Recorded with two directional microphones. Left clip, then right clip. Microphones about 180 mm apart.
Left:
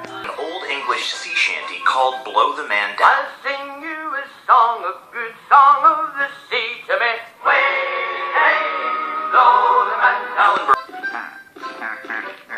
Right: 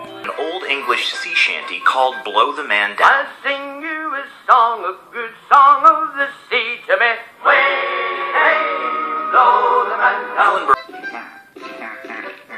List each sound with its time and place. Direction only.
0.8 s music: 50° right (ahead or behind)